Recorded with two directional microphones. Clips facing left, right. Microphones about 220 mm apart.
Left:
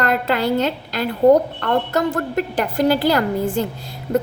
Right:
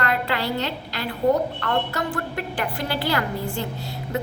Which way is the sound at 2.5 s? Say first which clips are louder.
Left 10 dB; 45° left (ahead or behind).